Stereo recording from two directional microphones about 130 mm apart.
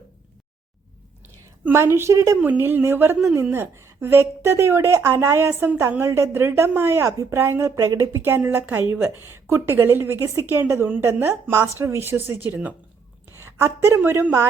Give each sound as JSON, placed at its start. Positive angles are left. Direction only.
{"t": 1.6, "sound": "a woman's voice", "side_deg": -20}